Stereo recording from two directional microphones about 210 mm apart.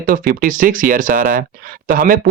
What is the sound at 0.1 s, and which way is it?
Speech, 40° right (ahead or behind).